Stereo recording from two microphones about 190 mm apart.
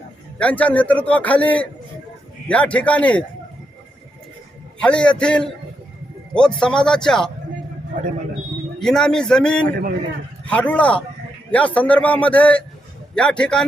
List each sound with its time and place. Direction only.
0.3 s a man's voice: 5° left (ahead or behind)
4.8 s a man's voice: 5° left (ahead or behind)
8.8 s a man's voice: centre (ahead or behind)
9.6 s a man's voice: 50° right (ahead or behind)
10.4 s a man's voice: 5° left (ahead or behind)